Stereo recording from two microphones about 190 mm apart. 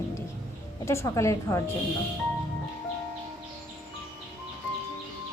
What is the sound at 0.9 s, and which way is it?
Speech, 15° left (ahead or behind).